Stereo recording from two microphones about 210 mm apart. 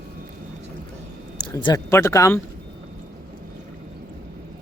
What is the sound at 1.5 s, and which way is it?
Speech, 15° left (ahead or behind).